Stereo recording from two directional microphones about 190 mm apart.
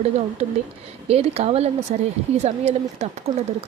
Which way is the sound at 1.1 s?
30° right (ahead or behind).